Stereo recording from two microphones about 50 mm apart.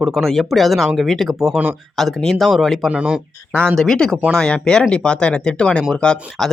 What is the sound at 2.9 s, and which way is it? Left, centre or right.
Speech, centre.